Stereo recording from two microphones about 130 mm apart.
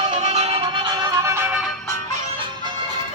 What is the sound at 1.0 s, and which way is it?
Music, 20° right (ahead or behind).